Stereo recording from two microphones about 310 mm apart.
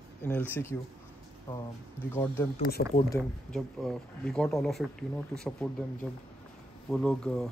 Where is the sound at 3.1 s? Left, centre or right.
Centre.